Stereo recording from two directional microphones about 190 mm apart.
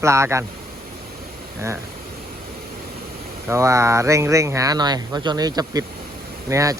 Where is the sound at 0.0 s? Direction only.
15° right (ahead or behind).